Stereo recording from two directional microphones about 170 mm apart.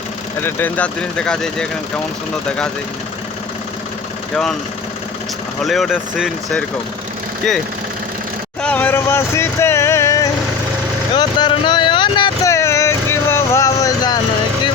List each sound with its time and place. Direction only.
0.4 s speech: 10° left (ahead or behind)
5.6 s speech: centre (ahead or behind)
8.6 s vehicle: 10° left (ahead or behind)
11.1 s speech: 25° left (ahead or behind)
12.5 s vehicle: 15° left (ahead or behind)